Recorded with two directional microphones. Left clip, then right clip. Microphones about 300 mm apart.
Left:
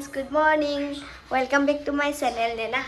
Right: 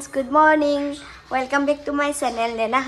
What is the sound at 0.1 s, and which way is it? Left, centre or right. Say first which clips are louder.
A woman's voice: right 6 dB; centre.